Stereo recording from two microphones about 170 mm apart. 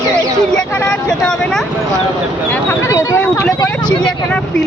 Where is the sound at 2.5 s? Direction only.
15° left (ahead or behind).